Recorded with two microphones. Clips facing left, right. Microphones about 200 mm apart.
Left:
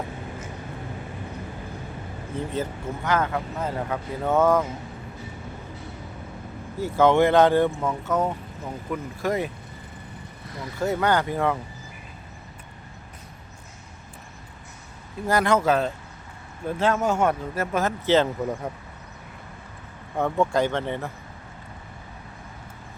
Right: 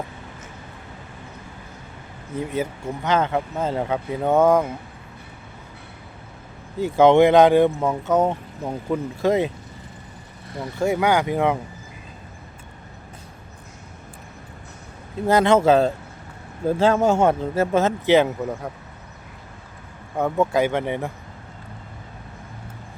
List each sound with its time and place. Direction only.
2.5 s speech: 10° right (ahead or behind)
3.1 s speech: 25° right (ahead or behind)
6.7 s speech: 20° right (ahead or behind)
10.8 s speech: 15° right (ahead or behind)
15.3 s speech: 25° right (ahead or behind)
20.1 s speech: 5° right (ahead or behind)